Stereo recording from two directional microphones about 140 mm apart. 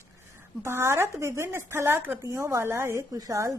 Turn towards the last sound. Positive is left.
turn(degrees=-25)  # may be behind; listen again after turning